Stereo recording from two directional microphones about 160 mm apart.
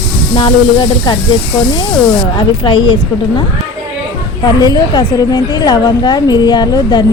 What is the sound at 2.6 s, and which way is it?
Speech, 30° left (ahead or behind).